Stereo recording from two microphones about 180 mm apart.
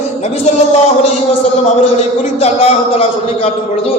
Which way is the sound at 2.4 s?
30° left (ahead or behind).